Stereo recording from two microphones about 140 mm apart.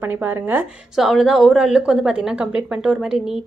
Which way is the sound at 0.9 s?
5° right (ahead or behind).